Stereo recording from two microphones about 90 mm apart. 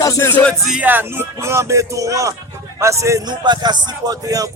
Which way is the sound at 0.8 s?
20° right (ahead or behind).